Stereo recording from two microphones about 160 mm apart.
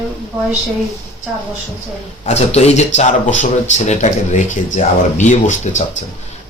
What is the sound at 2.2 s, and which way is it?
Speech, 40° left (ahead or behind).